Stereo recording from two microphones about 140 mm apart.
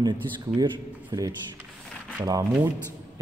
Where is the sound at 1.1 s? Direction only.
25° right (ahead or behind).